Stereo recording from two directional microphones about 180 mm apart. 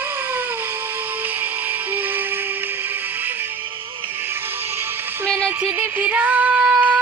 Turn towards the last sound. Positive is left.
turn(degrees=-10)  # may be behind; listen again after turning